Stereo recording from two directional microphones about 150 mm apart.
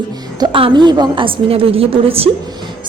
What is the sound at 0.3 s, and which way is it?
A woman's voice, 35° right (ahead or behind).